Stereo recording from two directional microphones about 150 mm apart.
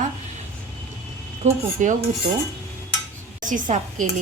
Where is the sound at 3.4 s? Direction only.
60° right (ahead or behind).